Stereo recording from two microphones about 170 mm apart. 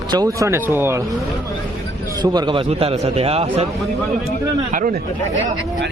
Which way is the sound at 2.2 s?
25° right (ahead or behind).